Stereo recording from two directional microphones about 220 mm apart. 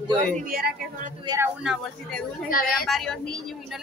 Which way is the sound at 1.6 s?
Centre (ahead or behind).